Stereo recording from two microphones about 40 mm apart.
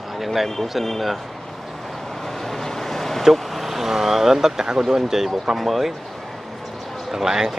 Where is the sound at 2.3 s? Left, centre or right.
Centre.